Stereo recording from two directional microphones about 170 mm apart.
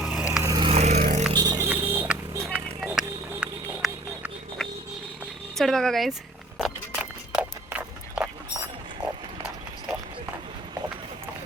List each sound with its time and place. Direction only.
0.0 s vehicle: centre (ahead or behind)
0.4 s vehicle: 20° right (ahead or behind)
0.7 s vehicle: 40° right (ahead or behind)
1.3 s music: 25° right (ahead or behind); by 4.7 s centre (ahead or behind)
5.5 s speech: centre (ahead or behind)
6.6 s a sound: 5° right (ahead or behind)